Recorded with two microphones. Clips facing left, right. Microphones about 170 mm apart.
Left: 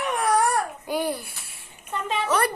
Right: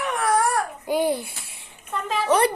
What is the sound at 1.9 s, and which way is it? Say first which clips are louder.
Speech: right 1 dB; centre (ahead or behind).